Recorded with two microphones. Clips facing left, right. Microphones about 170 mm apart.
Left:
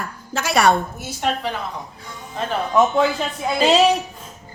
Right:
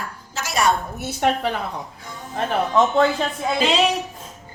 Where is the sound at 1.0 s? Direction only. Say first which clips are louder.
Right 3 dB; 65° right (ahead or behind).